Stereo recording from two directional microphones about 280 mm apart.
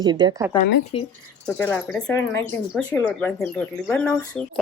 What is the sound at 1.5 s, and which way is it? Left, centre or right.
Speech, centre.